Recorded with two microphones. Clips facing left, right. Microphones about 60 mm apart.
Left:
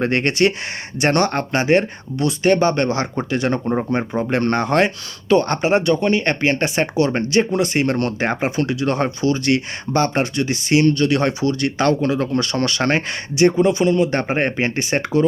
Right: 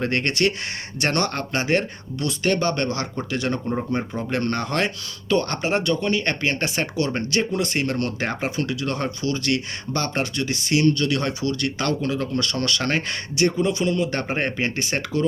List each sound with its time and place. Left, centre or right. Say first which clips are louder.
0.0 s speech: left 5 dB; left
7.9 s speech: left 5 dB; left